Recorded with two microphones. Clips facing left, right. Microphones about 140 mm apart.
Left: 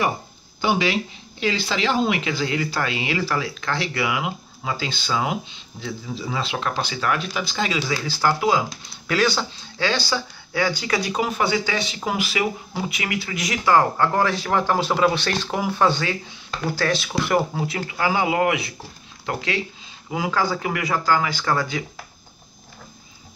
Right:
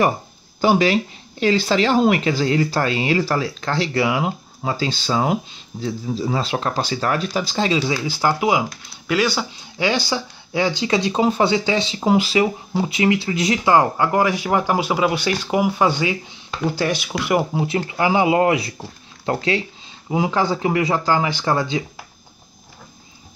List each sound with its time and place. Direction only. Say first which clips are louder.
0.6 s speech: right 5 dB; 40° right (ahead or behind)
8.1 s speech: even; 20° right (ahead or behind)
9.0 s speech: right 1 dB; 5° right (ahead or behind); by 13.7 s 30° right (ahead or behind)
13.7 s speech: even; 15° right (ahead or behind)
17.6 s speech: right 4 dB; 25° right (ahead or behind)